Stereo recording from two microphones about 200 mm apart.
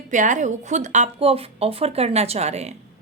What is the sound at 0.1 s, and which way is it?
Speech, 40° right (ahead or behind).